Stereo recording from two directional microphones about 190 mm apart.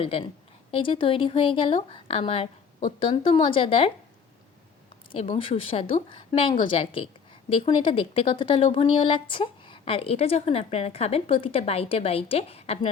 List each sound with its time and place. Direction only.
0.0 s speech: 30° left (ahead or behind)
5.1 s speech: 30° left (ahead or behind)